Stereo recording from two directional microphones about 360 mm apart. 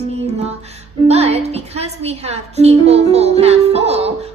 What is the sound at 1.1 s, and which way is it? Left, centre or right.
A woman's voice, centre.